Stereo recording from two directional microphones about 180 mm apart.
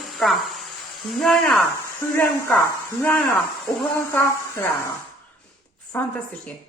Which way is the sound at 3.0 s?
10° left (ahead or behind).